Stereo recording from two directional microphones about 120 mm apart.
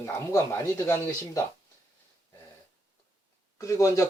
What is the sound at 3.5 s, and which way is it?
Speech, 25° left (ahead or behind).